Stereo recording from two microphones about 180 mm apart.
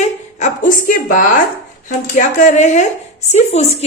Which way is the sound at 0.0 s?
40° left (ahead or behind).